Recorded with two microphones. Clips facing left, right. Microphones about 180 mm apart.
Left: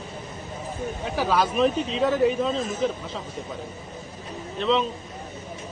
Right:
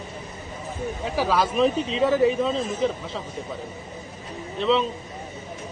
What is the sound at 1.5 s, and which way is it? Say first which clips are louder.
A man's voice: right 1 dB; centre (ahead or behind).